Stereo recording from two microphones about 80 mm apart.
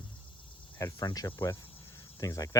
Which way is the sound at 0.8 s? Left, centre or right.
Left.